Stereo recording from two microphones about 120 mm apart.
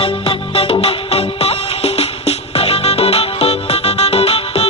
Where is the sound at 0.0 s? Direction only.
50° left (ahead or behind).